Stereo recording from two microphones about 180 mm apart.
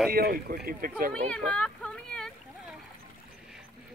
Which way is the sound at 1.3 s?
5° left (ahead or behind).